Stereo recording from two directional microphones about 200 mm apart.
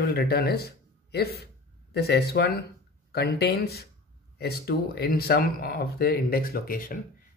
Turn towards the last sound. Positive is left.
turn(degrees=45)  # may be behind; listen again after turning